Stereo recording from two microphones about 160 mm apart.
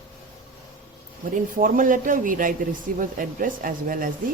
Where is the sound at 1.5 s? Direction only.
55° right (ahead or behind).